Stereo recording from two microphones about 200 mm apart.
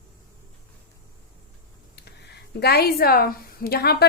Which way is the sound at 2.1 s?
55° left (ahead or behind).